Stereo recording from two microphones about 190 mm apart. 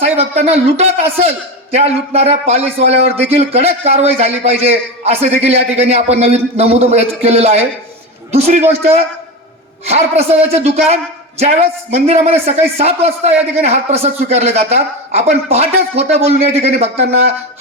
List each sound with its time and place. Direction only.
0.0 s a man's voice: 35° right (ahead or behind)